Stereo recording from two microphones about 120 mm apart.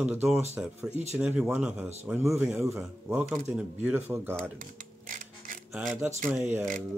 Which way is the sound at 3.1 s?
5° right (ahead or behind).